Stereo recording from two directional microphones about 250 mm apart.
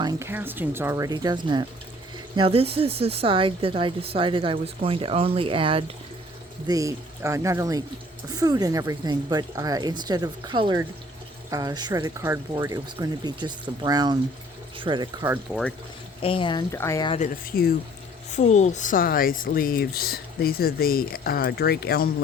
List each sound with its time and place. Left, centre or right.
0.0 s speech: centre
16.2 s speech: left
17.2 s speech: left